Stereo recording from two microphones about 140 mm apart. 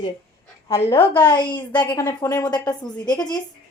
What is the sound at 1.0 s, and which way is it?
Speech, 10° left (ahead or behind).